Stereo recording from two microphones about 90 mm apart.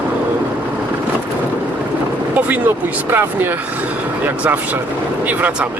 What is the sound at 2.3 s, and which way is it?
Speech, 20° right (ahead or behind).